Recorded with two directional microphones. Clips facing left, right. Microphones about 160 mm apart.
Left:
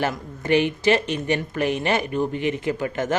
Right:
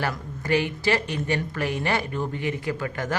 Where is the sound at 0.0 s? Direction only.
20° left (ahead or behind).